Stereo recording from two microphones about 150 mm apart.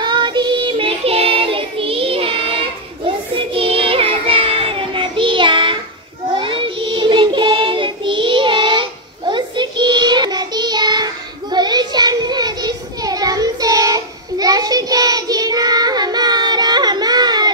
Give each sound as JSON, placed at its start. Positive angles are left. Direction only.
{"t": 0.0, "sound": "child singing", "side_deg": -30}
{"t": 3.3, "sound": "child singing", "side_deg": -40}